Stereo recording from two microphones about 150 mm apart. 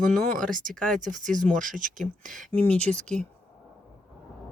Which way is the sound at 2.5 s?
10° left (ahead or behind).